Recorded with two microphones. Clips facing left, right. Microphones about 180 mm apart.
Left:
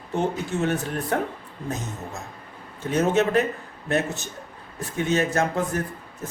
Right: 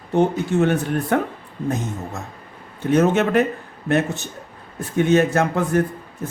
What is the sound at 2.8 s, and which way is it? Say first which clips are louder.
Speech: right 4 dB; 60° right (ahead or behind).